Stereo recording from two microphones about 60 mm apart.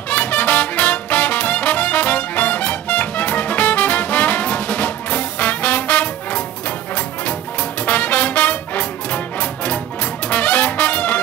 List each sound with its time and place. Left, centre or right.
0.1 s music: left
7.8 s music: left